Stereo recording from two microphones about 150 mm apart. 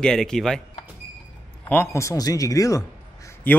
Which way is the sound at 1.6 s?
15° left (ahead or behind).